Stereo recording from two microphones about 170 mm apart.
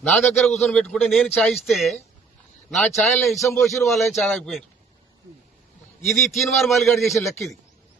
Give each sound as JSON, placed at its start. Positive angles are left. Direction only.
{"t": 0.0, "sound": "a man's voice", "side_deg": 5}
{"t": 3.4, "sound": "a man's voice", "side_deg": 20}
{"t": 3.8, "sound": "a man's voice", "side_deg": 0}
{"t": 6.1, "sound": "a man's voice", "side_deg": 0}